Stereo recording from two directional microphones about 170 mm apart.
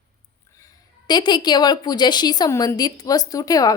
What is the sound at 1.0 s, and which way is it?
A woman's voice, 25° left (ahead or behind).